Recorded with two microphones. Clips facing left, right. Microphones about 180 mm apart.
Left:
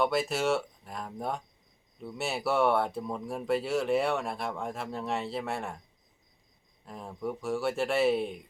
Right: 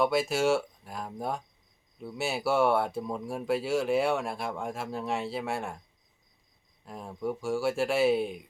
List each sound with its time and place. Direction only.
0.0 s speech: centre (ahead or behind)
6.8 s speech: centre (ahead or behind)